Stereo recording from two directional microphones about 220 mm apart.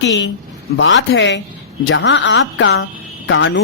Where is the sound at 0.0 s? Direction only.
60° left (ahead or behind).